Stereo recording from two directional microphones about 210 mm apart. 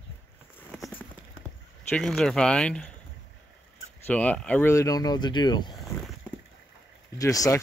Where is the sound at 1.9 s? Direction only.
Centre (ahead or behind).